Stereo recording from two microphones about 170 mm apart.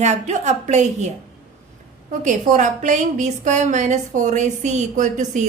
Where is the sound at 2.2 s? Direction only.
50° right (ahead or behind).